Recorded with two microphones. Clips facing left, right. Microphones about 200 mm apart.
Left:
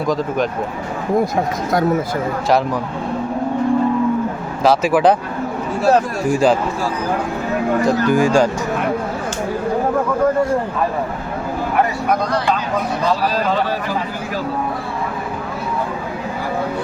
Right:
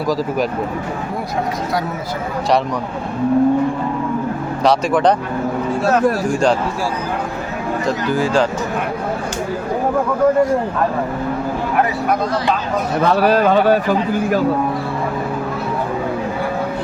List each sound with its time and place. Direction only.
4.6 s speech: 5° left (ahead or behind)
6.3 s speech: 5° left (ahead or behind)
8.1 s speech: 10° left (ahead or behind)
13.0 s a man's voice: 60° right (ahead or behind)